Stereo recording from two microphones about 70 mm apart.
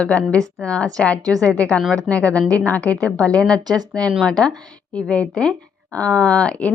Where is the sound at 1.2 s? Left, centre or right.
Right.